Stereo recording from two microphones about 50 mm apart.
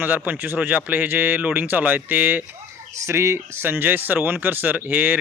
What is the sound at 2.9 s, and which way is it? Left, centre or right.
Speech, right.